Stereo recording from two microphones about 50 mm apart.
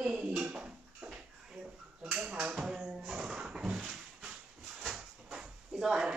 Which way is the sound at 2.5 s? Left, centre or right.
Centre.